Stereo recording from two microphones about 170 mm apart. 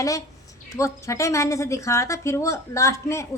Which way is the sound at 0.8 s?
15° left (ahead or behind).